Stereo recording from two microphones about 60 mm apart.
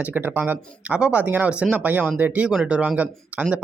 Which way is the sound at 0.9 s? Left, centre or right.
Centre.